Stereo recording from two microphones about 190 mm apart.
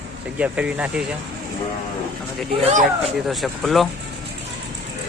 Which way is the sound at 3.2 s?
Centre (ahead or behind).